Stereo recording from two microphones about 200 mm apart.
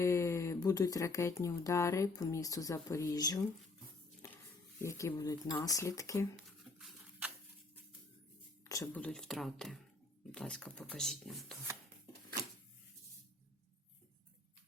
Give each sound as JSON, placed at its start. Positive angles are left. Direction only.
{"t": 0.0, "sound": "speech", "side_deg": 15}
{"t": 4.2, "sound": "a sound", "side_deg": 15}
{"t": 4.8, "sound": "speech", "side_deg": 15}
{"t": 6.3, "sound": "a sound", "side_deg": -5}
{"t": 8.7, "sound": "speech", "side_deg": 15}
{"t": 9.0, "sound": "speech", "side_deg": 5}